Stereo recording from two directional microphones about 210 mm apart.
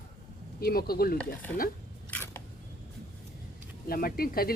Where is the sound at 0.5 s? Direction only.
45° left (ahead or behind).